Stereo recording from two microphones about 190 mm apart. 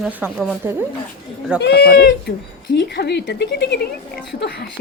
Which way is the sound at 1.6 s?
55° left (ahead or behind).